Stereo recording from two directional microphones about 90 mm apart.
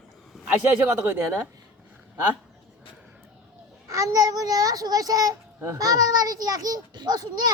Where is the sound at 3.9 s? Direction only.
45° right (ahead or behind).